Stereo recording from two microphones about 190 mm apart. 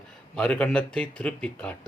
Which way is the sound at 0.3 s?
5° left (ahead or behind).